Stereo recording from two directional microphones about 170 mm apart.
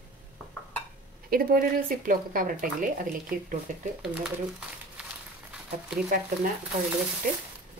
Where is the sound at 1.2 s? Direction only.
60° right (ahead or behind).